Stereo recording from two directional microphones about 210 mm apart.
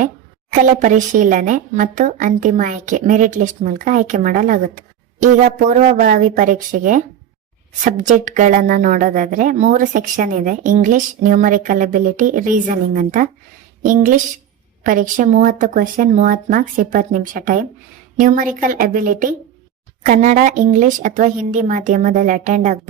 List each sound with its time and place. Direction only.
0.6 s a woman's voice: 35° right (ahead or behind)